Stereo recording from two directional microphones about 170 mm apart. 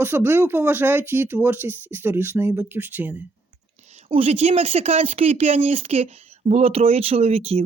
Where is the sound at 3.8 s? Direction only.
40° right (ahead or behind).